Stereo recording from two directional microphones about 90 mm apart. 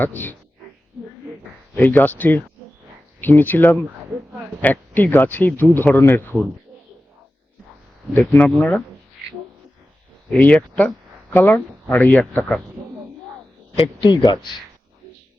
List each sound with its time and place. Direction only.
0.0 s speech: 20° left (ahead or behind)
1.7 s speech: 20° left (ahead or behind)
8.1 s speech: 20° left (ahead or behind)
10.3 s speech: 15° left (ahead or behind)
14.0 s speech: 55° left (ahead or behind)